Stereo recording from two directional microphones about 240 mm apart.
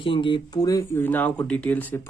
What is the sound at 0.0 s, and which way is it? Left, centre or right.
Speech, left.